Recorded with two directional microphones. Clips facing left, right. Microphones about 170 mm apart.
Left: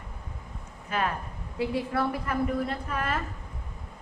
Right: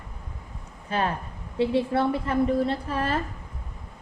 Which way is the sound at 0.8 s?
30° right (ahead or behind).